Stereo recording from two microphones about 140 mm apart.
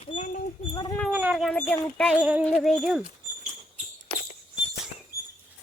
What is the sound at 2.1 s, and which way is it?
Speech, 10° right (ahead or behind).